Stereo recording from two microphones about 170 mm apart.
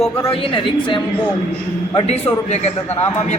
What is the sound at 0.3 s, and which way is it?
Speech, 30° left (ahead or behind).